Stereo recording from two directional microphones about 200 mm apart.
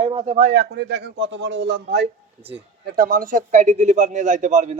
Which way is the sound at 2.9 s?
45° right (ahead or behind).